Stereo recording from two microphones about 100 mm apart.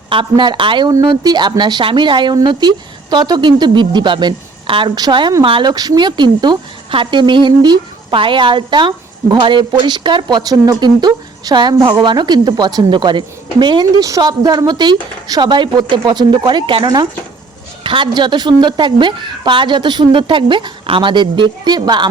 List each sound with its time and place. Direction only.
0.1 s a woman's voice: 55° right (ahead or behind)
0.9 s a woman's voice: 45° right (ahead or behind)
4.9 s a woman's voice: 45° right (ahead or behind)
5.7 s a woman's voice: 40° right (ahead or behind)
14.0 s a woman's voice: 40° right (ahead or behind)